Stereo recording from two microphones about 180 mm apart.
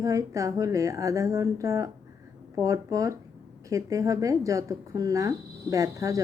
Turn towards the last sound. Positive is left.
turn(degrees=-15)  # may be behind; listen again after turning